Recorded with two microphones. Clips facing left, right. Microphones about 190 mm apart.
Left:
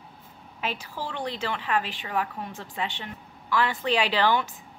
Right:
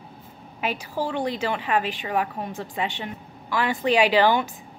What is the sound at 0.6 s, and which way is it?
A woman's voice, 15° right (ahead or behind).